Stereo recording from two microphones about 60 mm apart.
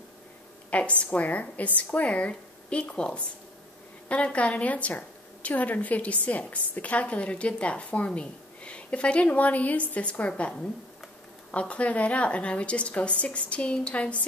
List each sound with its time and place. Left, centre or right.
0.7 s a woman's voice: left